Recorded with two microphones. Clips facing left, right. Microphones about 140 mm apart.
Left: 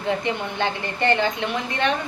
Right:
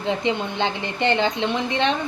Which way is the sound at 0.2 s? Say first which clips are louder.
Right 2 dB; 20° right (ahead or behind).